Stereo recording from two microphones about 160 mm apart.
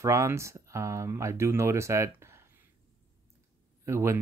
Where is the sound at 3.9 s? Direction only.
15° right (ahead or behind).